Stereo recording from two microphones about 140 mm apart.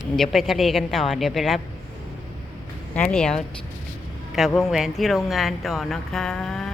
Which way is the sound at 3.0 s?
5° left (ahead or behind).